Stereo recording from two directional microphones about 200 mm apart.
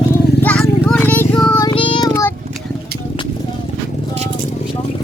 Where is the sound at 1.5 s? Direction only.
25° left (ahead or behind).